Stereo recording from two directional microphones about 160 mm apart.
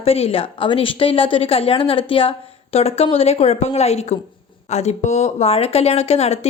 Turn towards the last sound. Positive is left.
turn(degrees=40)  # may be behind; listen again after turning